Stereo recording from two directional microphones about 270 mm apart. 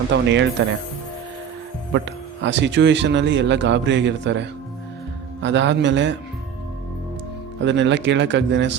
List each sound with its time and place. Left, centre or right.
0.1 s speech: right
1.9 s speech: right
7.6 s speech: right